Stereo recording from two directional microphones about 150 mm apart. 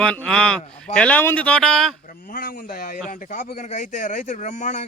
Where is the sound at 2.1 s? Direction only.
70° left (ahead or behind).